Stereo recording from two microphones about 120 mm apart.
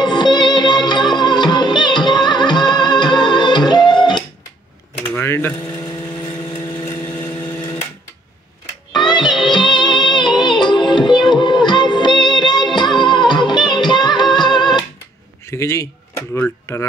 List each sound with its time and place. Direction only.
0.0 s music: 35° left (ahead or behind)
5.0 s a sound: 20° left (ahead or behind)
6.8 s vehicle: 20° left (ahead or behind)
8.9 s music: 40° left (ahead or behind)
11.2 s child singing: 40° left (ahead or behind)
11.6 s music: 40° left (ahead or behind)
15.5 s a sound: 25° left (ahead or behind)